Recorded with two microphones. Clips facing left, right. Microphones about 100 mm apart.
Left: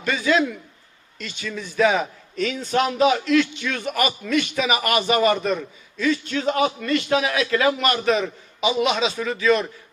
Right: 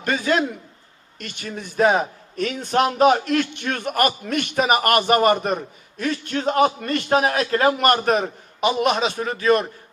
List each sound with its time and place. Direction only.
0.0 s a man's voice: 45° right (ahead or behind)
1.2 s a man's voice: 55° right (ahead or behind)